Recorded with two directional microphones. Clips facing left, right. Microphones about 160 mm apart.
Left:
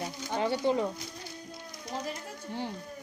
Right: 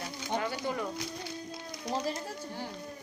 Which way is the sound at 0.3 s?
25° left (ahead or behind).